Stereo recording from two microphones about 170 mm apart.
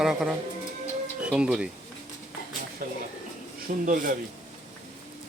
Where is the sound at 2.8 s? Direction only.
55° right (ahead or behind).